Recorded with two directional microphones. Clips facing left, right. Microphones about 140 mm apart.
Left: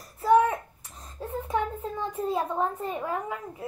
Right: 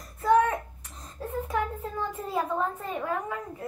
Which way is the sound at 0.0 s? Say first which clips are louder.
Left 1 dB; 5° left (ahead or behind).